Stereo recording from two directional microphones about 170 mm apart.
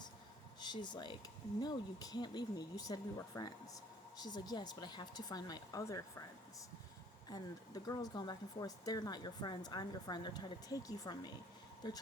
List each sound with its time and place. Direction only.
0.6 s speech: 25° left (ahead or behind)
7.3 s speech: 25° left (ahead or behind)